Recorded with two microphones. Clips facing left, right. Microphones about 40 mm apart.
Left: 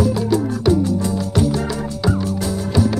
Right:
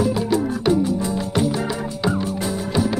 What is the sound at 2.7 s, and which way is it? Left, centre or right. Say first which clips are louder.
Music: left 3 dB; centre.